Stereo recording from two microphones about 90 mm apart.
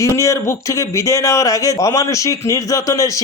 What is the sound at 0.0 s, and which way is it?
A man's voice, 35° left (ahead or behind).